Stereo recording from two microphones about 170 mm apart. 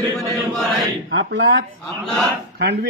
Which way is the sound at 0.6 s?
Centre (ahead or behind).